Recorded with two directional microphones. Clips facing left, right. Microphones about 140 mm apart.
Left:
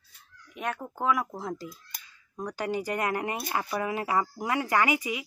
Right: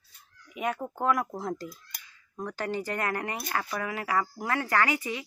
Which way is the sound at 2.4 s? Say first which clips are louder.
Left 1 dB; 15° left (ahead or behind).